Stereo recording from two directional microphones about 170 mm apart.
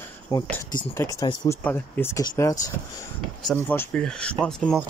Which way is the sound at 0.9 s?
20° left (ahead or behind).